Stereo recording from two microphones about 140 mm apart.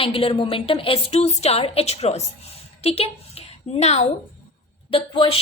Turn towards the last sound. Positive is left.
turn(degrees=40)  # may be behind; listen again after turning